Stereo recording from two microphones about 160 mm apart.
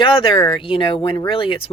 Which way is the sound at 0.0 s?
35° left (ahead or behind).